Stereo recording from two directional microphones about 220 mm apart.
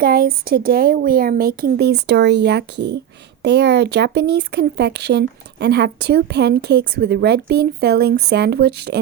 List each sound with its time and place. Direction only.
0.0 s speech: 45° right (ahead or behind)